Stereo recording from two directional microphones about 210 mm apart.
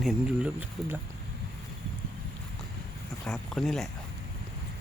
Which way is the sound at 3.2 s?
Centre (ahead or behind).